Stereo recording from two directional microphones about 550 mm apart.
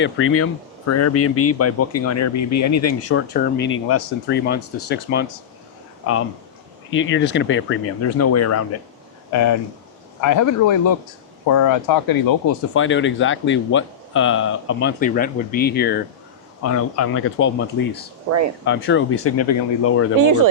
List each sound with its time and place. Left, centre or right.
0.0 s speech: left
6.9 s speech: left
12.7 s speech: left
20.1 s speech: right